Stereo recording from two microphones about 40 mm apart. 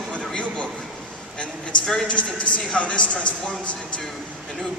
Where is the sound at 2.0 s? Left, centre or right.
Left.